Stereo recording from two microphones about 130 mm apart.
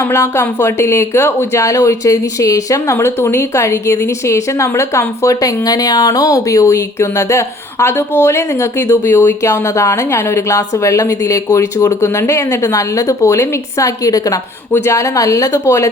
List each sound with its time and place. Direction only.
0.0 s speech: 20° left (ahead or behind)